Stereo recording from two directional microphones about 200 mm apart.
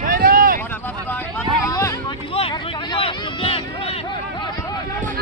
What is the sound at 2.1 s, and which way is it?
Vehicle, 25° left (ahead or behind).